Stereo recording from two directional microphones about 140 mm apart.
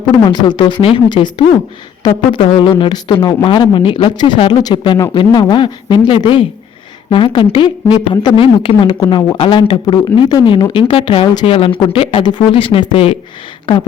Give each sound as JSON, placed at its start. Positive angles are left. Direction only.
{"t": 0.3, "sound": "speech", "side_deg": 35}